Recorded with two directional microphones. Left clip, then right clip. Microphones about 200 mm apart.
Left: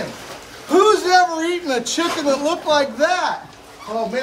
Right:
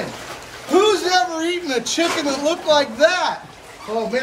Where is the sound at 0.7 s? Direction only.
15° left (ahead or behind).